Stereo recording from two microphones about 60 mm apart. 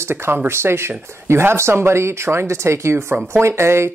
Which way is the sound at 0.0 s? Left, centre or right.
Right.